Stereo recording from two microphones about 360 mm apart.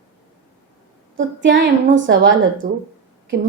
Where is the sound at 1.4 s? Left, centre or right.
Right.